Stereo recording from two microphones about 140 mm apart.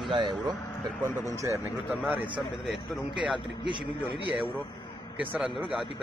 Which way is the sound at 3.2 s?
5° right (ahead or behind).